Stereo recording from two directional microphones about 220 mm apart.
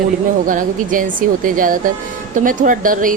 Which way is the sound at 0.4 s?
40° right (ahead or behind).